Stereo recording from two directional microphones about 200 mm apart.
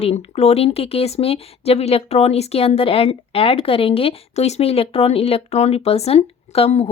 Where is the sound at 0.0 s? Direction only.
30° left (ahead or behind).